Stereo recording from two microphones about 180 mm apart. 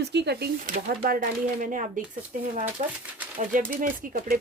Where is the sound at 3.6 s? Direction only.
50° right (ahead or behind).